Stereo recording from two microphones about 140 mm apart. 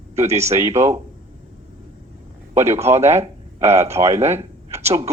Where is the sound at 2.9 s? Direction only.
50° right (ahead or behind).